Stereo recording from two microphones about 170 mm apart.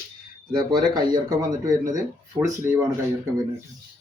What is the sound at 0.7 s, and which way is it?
Speech, 25° right (ahead or behind).